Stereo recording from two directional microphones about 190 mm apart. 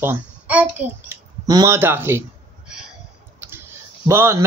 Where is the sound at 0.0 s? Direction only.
10° right (ahead or behind).